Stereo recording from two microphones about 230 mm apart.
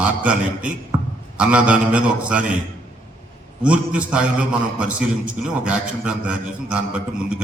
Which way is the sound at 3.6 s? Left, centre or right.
Centre.